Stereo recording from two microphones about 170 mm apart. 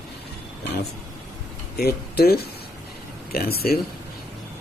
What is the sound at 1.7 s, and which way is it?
Speech, 65° left (ahead or behind).